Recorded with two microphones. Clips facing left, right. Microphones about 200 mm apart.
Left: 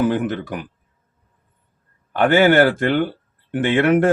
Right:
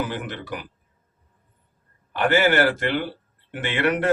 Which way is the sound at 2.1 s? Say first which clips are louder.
Left 6 dB; 55° left (ahead or behind).